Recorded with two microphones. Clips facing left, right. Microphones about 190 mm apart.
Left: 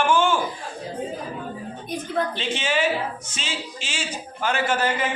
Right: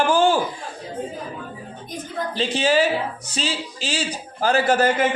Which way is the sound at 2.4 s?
35° right (ahead or behind).